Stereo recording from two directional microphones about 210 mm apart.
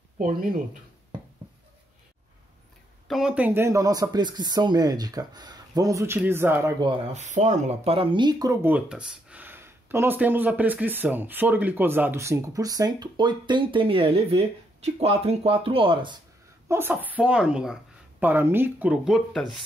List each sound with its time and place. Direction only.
0.2 s speech: 40° right (ahead or behind)
3.1 s speech: 5° right (ahead or behind)
6.8 s speech: 25° right (ahead or behind)
7.2 s speech: 35° right (ahead or behind)
16.6 s speech: 10° right (ahead or behind)